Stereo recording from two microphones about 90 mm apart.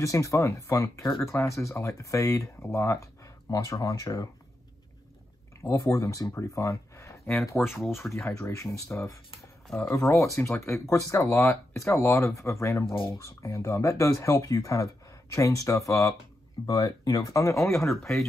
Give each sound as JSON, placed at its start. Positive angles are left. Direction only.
{"t": 0.0, "sound": "speech", "side_deg": 35}
{"t": 5.6, "sound": "speech", "side_deg": 35}
{"t": 7.6, "sound": "speech", "side_deg": 10}
{"t": 8.1, "sound": "speech", "side_deg": 35}
{"t": 12.8, "sound": "speech", "side_deg": 75}
{"t": 13.2, "sound": "speech", "side_deg": 35}